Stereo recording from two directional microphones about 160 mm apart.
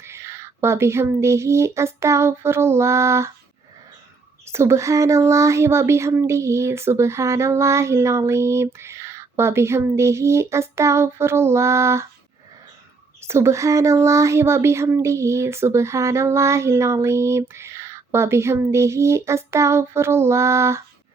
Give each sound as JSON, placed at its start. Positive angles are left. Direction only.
{"t": 0.0, "sound": "speech", "side_deg": -15}
{"t": 4.4, "sound": "speech", "side_deg": -15}
{"t": 13.2, "sound": "speech", "side_deg": -15}